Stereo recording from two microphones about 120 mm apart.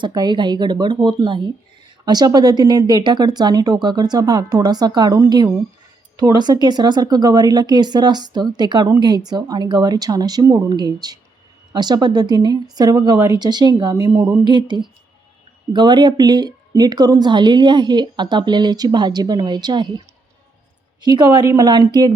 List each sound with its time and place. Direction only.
0.0 s speech: 35° right (ahead or behind)
13.9 s a sound: 20° right (ahead or behind)
14.4 s speech: 40° right (ahead or behind)
21.0 s speech: 40° right (ahead or behind)